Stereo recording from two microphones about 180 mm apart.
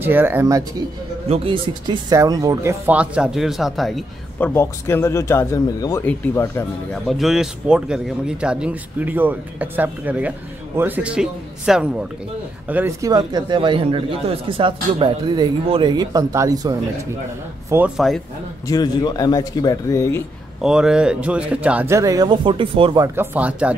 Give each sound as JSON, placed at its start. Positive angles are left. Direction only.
{"t": 0.0, "sound": "speech", "side_deg": -10}
{"t": 1.3, "sound": "speech", "side_deg": -30}
{"t": 4.6, "sound": "speech", "side_deg": 15}
{"t": 7.1, "sound": "a man's voice", "side_deg": 0}
{"t": 17.6, "sound": "a man's voice", "side_deg": -10}
{"t": 18.7, "sound": "speech", "side_deg": 20}
{"t": 20.6, "sound": "speech", "side_deg": -5}
{"t": 23.1, "sound": "speech", "side_deg": -10}